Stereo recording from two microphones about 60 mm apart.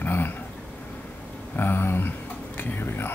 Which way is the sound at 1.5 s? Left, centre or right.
Left.